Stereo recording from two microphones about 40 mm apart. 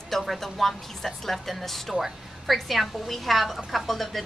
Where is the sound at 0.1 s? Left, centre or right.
Centre.